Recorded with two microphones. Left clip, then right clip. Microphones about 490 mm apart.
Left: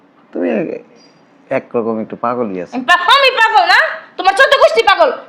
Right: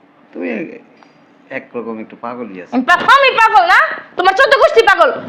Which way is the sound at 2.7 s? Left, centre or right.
Right.